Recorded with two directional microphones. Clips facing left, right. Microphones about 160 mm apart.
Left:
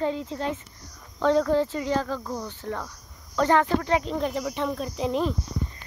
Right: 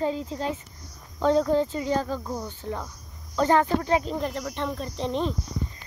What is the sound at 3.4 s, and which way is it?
Speech, 30° right (ahead or behind).